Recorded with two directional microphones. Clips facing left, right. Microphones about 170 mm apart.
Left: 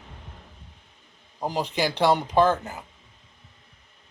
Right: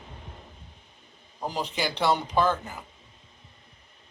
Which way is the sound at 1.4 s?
20° left (ahead or behind).